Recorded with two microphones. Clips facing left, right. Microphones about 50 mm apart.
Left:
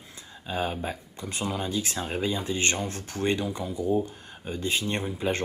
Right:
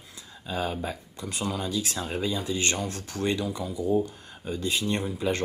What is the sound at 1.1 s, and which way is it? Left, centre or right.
Speech, left.